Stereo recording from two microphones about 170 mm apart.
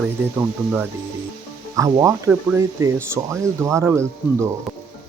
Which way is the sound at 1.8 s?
20° right (ahead or behind).